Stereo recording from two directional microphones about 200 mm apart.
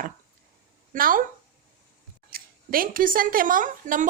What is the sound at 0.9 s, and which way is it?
Speech, 45° right (ahead or behind).